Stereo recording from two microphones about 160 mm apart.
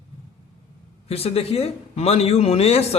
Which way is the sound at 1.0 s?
40° left (ahead or behind).